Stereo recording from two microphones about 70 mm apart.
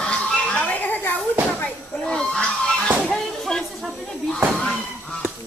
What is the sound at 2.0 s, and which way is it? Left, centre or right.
Fowl, centre.